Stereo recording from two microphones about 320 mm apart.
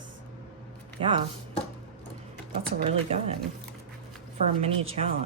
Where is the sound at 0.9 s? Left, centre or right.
Centre.